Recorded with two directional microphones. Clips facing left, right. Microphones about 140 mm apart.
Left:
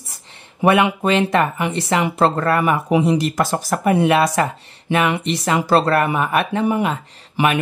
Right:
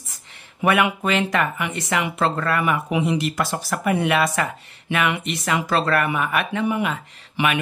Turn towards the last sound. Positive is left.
turn(degrees=35)  # may be behind; listen again after turning